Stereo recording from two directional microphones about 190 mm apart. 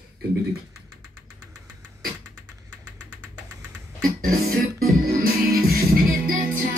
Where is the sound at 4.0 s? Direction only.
50° right (ahead or behind).